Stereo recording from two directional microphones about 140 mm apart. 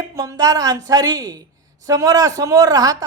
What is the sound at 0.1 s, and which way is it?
A woman's voice, 25° right (ahead or behind).